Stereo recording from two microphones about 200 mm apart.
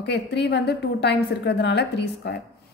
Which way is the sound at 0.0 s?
60° left (ahead or behind).